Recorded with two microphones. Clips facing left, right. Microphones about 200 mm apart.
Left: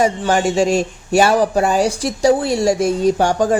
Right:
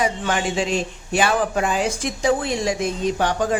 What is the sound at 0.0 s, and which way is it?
A man's voice, 45° left (ahead or behind).